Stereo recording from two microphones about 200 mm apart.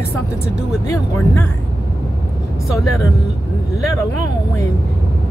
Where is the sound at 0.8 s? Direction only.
15° left (ahead or behind).